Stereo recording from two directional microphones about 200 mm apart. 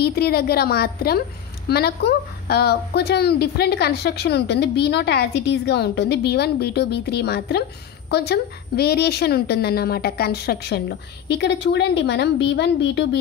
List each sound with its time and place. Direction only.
0.0 s a woman's voice: 50° left (ahead or behind)